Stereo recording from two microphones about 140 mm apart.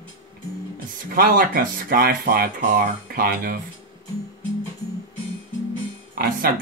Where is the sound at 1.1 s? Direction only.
90° right.